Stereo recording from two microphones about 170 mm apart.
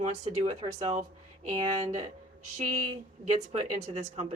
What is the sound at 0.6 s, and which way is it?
Speech, 40° right (ahead or behind).